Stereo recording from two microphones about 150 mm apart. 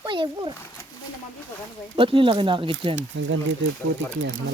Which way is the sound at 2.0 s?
35° right (ahead or behind).